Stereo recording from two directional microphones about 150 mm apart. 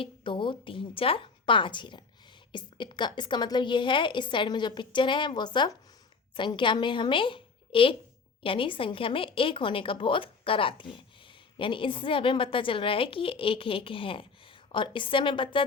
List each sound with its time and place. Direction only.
0.0 s a woman's voice: 35° left (ahead or behind)